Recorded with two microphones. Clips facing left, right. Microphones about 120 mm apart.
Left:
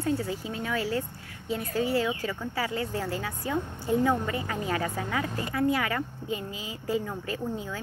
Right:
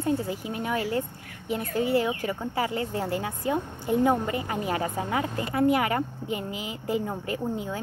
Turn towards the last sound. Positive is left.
turn(degrees=-20)  # may be behind; listen again after turning